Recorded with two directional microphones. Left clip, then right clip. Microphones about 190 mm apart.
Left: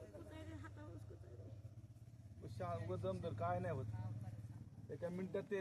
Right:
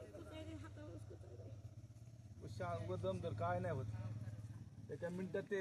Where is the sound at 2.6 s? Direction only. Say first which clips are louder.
Right 1 dB; 10° right (ahead or behind).